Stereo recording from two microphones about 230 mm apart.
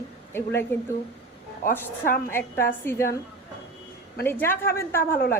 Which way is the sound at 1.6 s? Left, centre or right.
Left.